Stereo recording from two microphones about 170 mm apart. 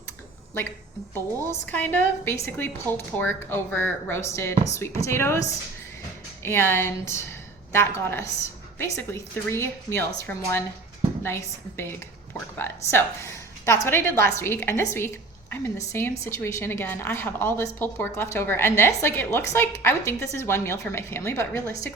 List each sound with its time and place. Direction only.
1.1 s a woman's voice: 10° left (ahead or behind)